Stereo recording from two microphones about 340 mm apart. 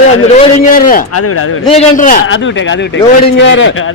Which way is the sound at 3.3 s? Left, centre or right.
Left.